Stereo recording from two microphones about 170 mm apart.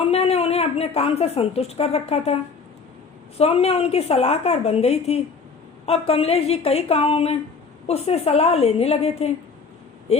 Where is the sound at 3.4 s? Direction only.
35° left (ahead or behind).